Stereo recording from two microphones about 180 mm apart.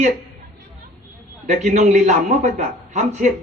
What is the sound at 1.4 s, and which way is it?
A man's voice, 45° right (ahead or behind).